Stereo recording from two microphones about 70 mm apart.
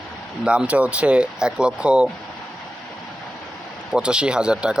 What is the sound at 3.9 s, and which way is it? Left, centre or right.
Speech, centre.